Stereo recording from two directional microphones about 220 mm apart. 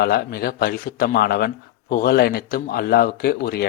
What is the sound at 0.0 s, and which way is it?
Speech, 45° left (ahead or behind).